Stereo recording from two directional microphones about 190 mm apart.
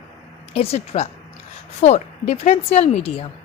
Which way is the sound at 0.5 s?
35° left (ahead or behind).